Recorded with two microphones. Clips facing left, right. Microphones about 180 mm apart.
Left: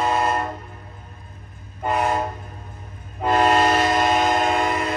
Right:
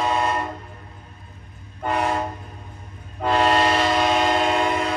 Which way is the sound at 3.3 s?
45° left (ahead or behind).